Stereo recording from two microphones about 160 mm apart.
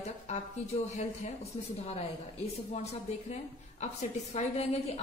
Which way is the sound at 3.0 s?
45° left (ahead or behind).